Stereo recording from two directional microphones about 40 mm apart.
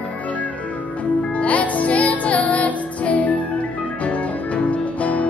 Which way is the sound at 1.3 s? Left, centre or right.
Left.